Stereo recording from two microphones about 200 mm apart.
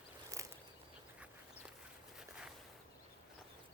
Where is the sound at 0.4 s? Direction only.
15° right (ahead or behind).